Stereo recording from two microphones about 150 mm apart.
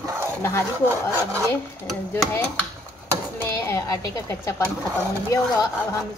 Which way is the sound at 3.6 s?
20° left (ahead or behind).